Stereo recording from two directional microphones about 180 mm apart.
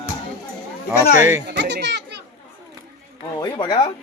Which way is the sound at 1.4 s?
70° right (ahead or behind).